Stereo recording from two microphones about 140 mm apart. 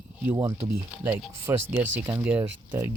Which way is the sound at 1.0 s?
15° right (ahead or behind).